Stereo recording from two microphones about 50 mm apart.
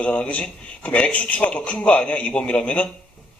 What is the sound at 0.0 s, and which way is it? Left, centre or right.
A man's voice, left.